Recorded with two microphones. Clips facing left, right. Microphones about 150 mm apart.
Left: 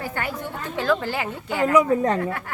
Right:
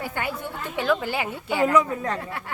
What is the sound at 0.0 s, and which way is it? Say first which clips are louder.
A woman's voice: left 1 dB; 20° right (ahead or behind).